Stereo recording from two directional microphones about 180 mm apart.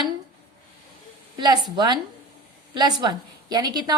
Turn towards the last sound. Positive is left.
turn(degrees=-25)  # may be behind; listen again after turning